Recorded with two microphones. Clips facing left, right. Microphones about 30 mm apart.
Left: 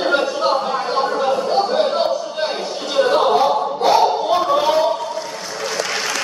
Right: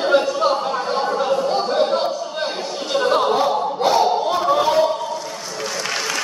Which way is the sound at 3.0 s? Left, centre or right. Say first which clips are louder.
Left 3 dB; centre.